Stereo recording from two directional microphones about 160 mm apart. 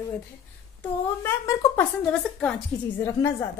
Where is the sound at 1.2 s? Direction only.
15° left (ahead or behind).